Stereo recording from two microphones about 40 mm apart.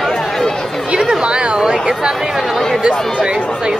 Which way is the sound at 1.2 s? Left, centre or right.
Right.